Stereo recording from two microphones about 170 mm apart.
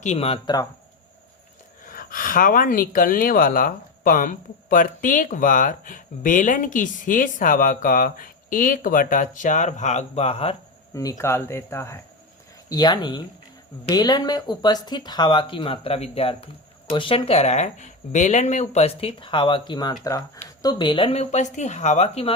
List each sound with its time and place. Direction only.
0.0 s speech: 40° left (ahead or behind)
1.8 s speech: 55° left (ahead or behind); by 10.6 s 35° left (ahead or behind)
10.9 s speech: 20° left (ahead or behind); by 22.4 s 35° left (ahead or behind)